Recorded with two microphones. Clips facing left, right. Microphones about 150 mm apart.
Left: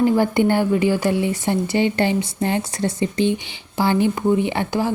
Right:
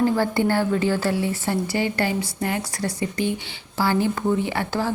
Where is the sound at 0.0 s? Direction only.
20° left (ahead or behind).